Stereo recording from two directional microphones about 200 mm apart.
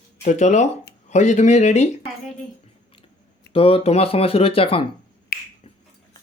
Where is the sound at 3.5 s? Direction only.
25° left (ahead or behind).